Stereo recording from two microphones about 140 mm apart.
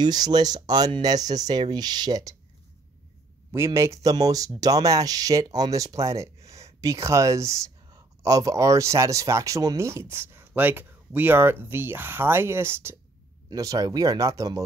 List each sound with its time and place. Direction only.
0.0 s speech: 30° right (ahead or behind)
3.5 s speech: 20° right (ahead or behind)